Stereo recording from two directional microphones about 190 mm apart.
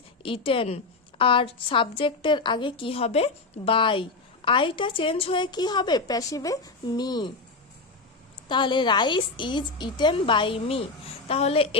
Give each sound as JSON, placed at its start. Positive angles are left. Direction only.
{"t": 0.2, "sound": "a woman's voice", "side_deg": 30}
{"t": 8.4, "sound": "a woman's voice", "side_deg": 25}